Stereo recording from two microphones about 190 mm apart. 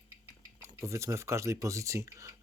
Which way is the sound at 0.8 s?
15° right (ahead or behind).